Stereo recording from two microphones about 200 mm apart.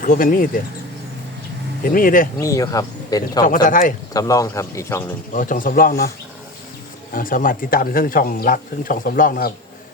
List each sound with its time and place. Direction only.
0.0 s speech: 45° left (ahead or behind)
1.8 s speech: 45° left (ahead or behind)
2.4 s speech: 15° left (ahead or behind)
3.7 s a man's voice: 40° left (ahead or behind)
4.1 s speech: 15° left (ahead or behind)
5.3 s speech: 40° left (ahead or behind)
7.1 s speech: 45° left (ahead or behind)